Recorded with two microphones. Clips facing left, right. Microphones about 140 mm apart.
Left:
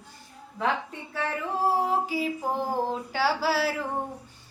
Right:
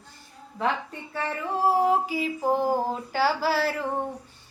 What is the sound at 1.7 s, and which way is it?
A woman's voice, centre (ahead or behind).